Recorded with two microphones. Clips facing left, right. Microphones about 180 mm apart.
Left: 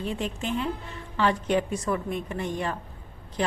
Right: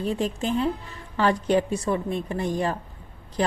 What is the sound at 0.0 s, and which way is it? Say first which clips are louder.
A woman's voice: right 4 dB; 40° right (ahead or behind).